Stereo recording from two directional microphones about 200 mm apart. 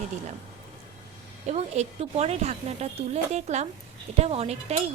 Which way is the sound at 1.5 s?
35° right (ahead or behind).